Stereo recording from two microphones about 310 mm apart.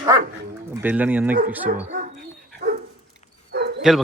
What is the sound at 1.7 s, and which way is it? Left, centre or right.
Speech, right.